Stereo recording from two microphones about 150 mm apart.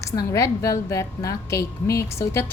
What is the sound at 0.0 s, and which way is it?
A woman's voice, 20° left (ahead or behind).